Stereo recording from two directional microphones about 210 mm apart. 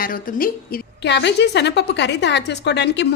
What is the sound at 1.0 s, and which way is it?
A woman's voice, 55° left (ahead or behind).